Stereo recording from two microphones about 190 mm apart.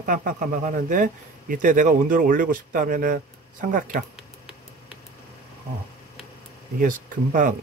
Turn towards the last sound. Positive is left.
turn(degrees=-45)  # may be behind; listen again after turning